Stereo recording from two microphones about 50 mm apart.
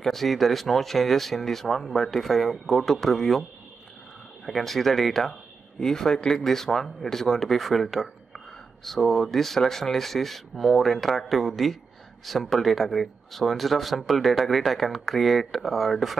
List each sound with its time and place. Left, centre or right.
0.0 s speech: centre
4.5 s speech: centre